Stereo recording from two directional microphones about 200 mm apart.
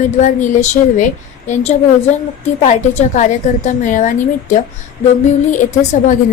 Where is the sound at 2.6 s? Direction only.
35° left (ahead or behind).